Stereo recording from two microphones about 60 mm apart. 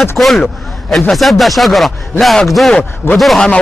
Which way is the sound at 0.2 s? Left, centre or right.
Centre.